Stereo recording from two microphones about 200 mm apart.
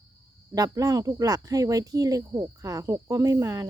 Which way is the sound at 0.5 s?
20° right (ahead or behind).